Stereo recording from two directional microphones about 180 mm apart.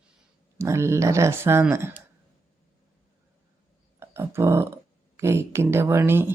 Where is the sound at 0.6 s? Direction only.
15° right (ahead or behind).